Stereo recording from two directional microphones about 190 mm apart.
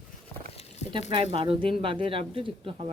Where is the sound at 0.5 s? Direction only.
30° left (ahead or behind).